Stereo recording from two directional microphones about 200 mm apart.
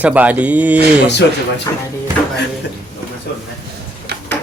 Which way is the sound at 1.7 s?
15° left (ahead or behind).